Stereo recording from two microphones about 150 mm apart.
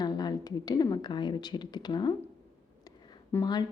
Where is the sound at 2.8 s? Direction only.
20° left (ahead or behind).